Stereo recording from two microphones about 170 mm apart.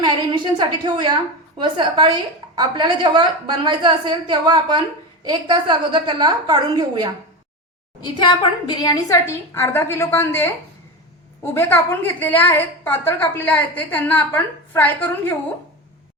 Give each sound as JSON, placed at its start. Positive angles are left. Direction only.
{"t": 0.0, "sound": "a woman's voice", "side_deg": -25}
{"t": 8.0, "sound": "a woman's voice", "side_deg": 25}